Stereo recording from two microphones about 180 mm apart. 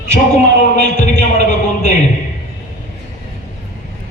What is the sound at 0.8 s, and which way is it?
A man's voice, 40° left (ahead or behind).